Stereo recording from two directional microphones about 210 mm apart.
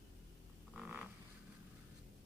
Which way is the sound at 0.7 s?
5° right (ahead or behind).